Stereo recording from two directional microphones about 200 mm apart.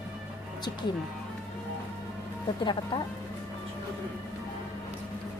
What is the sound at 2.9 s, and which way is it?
Speech, 20° left (ahead or behind).